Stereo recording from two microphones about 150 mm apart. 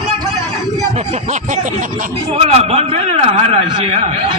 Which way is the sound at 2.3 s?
45° right (ahead or behind).